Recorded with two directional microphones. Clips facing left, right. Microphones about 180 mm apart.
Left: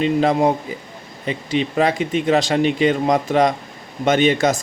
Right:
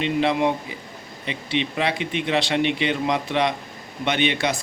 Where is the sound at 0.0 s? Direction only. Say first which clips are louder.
Left 5 dB; 40° left (ahead or behind).